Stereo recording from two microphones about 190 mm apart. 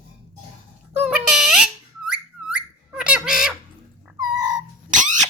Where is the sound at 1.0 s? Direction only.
5° right (ahead or behind).